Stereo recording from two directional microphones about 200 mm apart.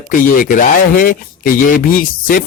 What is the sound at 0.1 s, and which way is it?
Speech, 40° left (ahead or behind).